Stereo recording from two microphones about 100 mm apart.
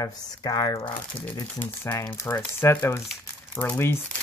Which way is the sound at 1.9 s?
30° left (ahead or behind).